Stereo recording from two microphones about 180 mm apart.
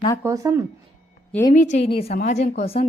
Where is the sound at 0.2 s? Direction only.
15° right (ahead or behind).